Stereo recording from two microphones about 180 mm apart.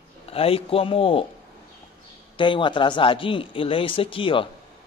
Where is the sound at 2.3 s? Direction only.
25° left (ahead or behind).